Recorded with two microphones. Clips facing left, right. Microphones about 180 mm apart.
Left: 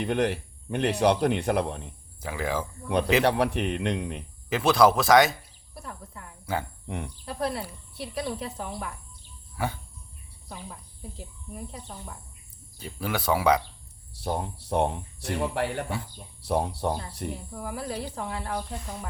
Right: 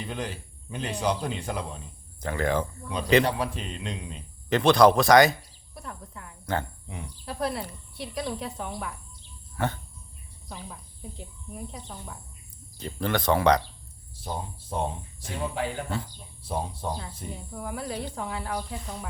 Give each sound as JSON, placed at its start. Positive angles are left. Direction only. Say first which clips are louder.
{"t": 0.0, "sound": "speech", "louder": "left 8 dB", "side_deg": 65}
{"t": 2.2, "sound": "speech", "louder": "right 3 dB", "side_deg": 5}
{"t": 3.2, "sound": "speech", "louder": "left 5 dB", "side_deg": 70}
{"t": 4.4, "sound": "speech", "louder": "right 2 dB", "side_deg": 5}
{"t": 6.8, "sound": "speech", "louder": "left 6 dB", "side_deg": 60}
{"t": 7.3, "sound": "speech", "louder": "right 1 dB", "side_deg": 0}
{"t": 14.2, "sound": "speech", "louder": "left 5 dB", "side_deg": 65}
{"t": 17.5, "sound": "speech", "louder": "even", "side_deg": 0}